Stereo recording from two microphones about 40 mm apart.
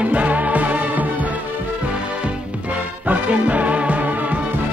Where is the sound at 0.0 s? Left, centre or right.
Right.